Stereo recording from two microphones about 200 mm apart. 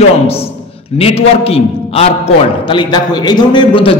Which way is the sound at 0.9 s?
30° left (ahead or behind).